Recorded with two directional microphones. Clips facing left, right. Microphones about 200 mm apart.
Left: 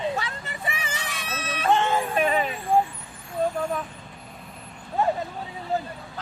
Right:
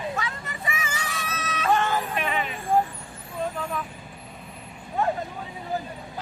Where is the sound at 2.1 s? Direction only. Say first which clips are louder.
Left 5 dB; 40° left (ahead or behind).